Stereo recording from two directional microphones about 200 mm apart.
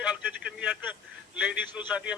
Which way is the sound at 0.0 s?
5° right (ahead or behind).